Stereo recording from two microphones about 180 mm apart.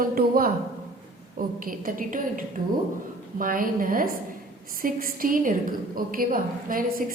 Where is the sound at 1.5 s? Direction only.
50° right (ahead or behind).